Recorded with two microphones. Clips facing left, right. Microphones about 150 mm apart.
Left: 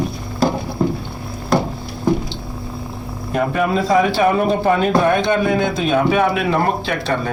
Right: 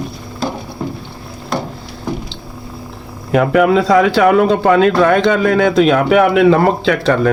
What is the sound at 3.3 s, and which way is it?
A man's voice, 90° right.